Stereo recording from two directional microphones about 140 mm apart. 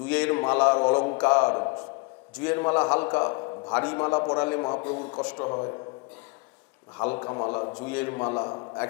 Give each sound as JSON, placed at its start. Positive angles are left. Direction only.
{"t": 0.0, "sound": "a man's voice", "side_deg": 10}
{"t": 2.3, "sound": "a man's voice", "side_deg": 10}
{"t": 5.2, "sound": "a man's voice", "side_deg": 10}
{"t": 5.5, "sound": "a man's voice", "side_deg": 25}
{"t": 7.0, "sound": "a man's voice", "side_deg": 15}
{"t": 7.8, "sound": "a man's voice", "side_deg": 10}